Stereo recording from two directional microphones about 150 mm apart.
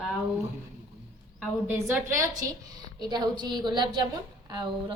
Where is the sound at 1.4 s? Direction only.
10° right (ahead or behind).